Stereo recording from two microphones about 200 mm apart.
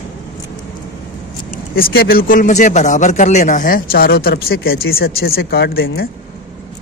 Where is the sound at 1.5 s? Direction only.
50° left (ahead or behind).